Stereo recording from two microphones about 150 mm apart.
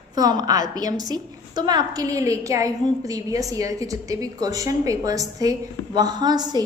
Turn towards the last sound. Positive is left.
turn(degrees=-25)  # may be behind; listen again after turning